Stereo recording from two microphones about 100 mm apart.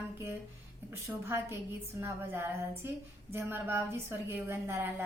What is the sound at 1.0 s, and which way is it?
A woman's voice, 25° right (ahead or behind).